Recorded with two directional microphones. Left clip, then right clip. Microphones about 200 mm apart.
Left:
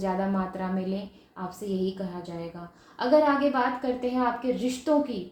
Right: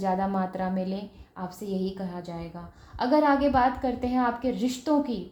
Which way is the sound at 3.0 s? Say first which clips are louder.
Left 1 dB; 40° right (ahead or behind).